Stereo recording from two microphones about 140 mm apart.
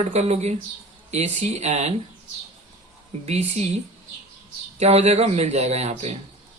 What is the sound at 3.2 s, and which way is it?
Speech, 50° right (ahead or behind).